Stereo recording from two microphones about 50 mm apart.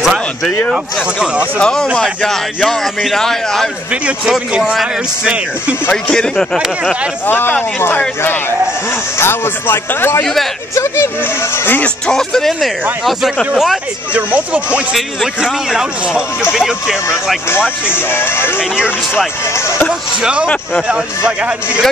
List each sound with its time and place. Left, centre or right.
1.6 s speech: centre
4.3 s a man's voice: centre
6.1 s speech: centre
6.6 s a man's voice: centre
7.2 s speech: left
8.2 s speech: left
10.7 s speech: left
12.1 s speech: centre
14.1 s speech: right
15.0 s a man's voice: centre
17.5 s speech: left
19.9 s speech: centre